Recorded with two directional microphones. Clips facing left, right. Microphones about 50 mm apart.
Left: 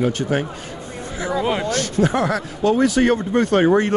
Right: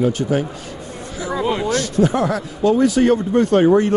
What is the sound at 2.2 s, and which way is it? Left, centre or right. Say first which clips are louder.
Speech: right 1 dB; left.